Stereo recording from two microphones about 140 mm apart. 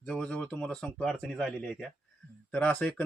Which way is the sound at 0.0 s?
5° left (ahead or behind).